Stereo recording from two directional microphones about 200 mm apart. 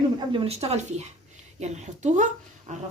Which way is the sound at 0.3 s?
30° right (ahead or behind).